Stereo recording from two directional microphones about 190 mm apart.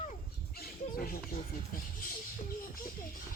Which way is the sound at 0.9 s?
50° left (ahead or behind).